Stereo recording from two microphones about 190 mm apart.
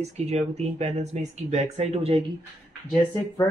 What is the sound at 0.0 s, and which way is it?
Speech, 35° right (ahead or behind).